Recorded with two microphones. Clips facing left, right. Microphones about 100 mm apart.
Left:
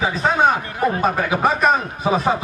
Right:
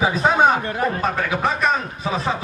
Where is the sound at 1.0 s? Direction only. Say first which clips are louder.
Left 3 dB; 10° left (ahead or behind).